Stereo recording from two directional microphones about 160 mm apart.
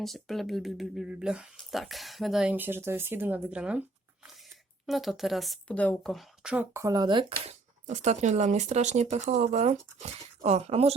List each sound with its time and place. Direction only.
0.0 s speech: centre (ahead or behind)
6.7 s speech: 20° right (ahead or behind); by 10.9 s 40° right (ahead or behind)